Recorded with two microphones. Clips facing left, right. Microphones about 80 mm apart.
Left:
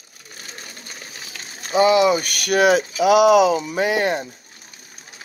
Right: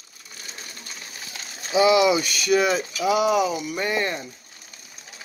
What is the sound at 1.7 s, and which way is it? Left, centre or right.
Speech, left.